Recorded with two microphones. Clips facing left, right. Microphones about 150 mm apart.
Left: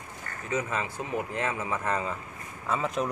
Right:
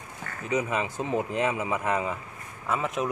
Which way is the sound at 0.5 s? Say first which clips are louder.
Right 3 dB; 15° right (ahead or behind).